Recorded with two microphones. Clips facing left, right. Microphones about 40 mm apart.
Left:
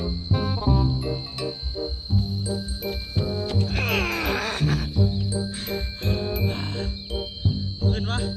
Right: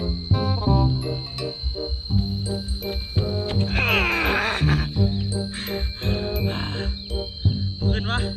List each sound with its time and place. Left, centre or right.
0.3 s music: centre
3.2 s music: right
7.9 s music: right